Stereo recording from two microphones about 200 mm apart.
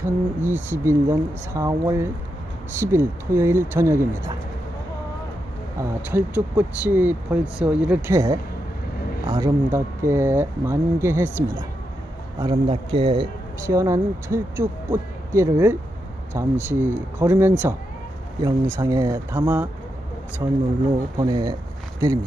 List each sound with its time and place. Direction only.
0.0 s a man's voice: 10° right (ahead or behind)
5.8 s a man's voice: 10° right (ahead or behind)
9.2 s a man's voice: 20° right (ahead or behind)
12.4 s a man's voice: 25° right (ahead or behind)
20.4 s speech: 20° right (ahead or behind)